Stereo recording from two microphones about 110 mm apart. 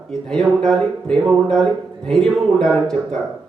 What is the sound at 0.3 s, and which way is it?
Speech, 5° left (ahead or behind).